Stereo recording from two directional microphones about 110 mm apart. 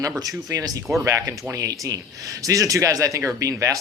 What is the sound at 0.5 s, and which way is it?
Speech, 35° right (ahead or behind).